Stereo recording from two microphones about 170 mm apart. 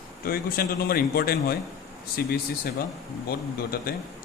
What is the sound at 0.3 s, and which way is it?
A man's voice, 60° left (ahead or behind).